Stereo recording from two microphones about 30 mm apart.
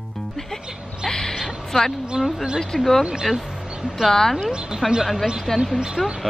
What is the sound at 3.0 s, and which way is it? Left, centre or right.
Speech, right.